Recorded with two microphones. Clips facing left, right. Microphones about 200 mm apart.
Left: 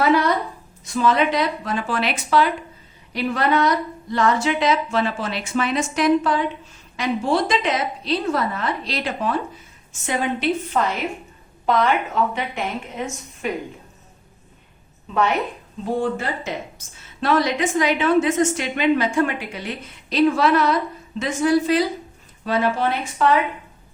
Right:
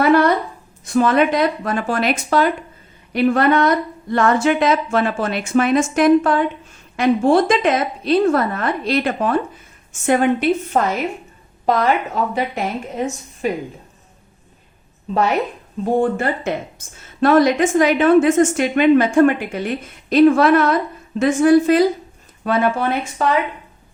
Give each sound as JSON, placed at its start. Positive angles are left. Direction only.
{"t": 0.0, "sound": "a sound", "side_deg": -55}
{"t": 0.9, "sound": "a woman's voice", "side_deg": -55}
{"t": 16.0, "sound": "a woman's voice", "side_deg": -55}